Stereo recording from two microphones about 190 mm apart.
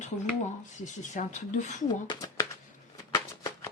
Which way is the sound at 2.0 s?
20° left (ahead or behind).